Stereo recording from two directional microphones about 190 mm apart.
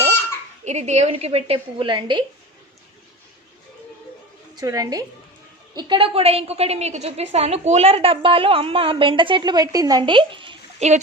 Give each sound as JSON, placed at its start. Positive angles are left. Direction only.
{"t": 0.6, "sound": "a woman's voice", "side_deg": -35}
{"t": 4.5, "sound": "a woman's voice", "side_deg": -20}